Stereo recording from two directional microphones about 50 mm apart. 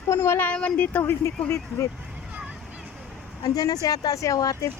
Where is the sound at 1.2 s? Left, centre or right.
Left.